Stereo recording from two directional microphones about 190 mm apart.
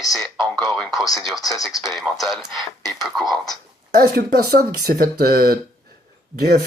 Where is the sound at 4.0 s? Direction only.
55° right (ahead or behind).